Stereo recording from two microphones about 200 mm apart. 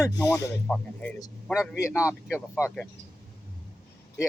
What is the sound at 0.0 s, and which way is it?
Speech, 15° left (ahead or behind).